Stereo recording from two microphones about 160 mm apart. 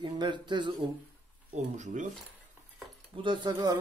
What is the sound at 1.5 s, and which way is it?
Speech, 50° right (ahead or behind).